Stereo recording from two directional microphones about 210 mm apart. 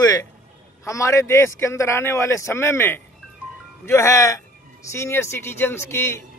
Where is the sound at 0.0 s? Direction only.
20° left (ahead or behind).